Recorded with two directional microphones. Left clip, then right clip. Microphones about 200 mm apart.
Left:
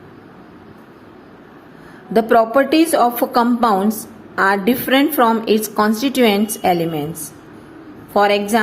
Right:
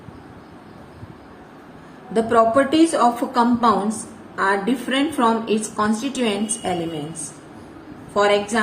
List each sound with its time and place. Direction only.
2.3 s a woman's voice: 45° left (ahead or behind)
8.1 s a woman's voice: 40° left (ahead or behind)